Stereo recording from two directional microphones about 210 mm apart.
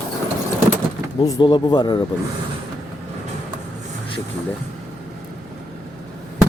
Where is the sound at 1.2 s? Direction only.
20° left (ahead or behind).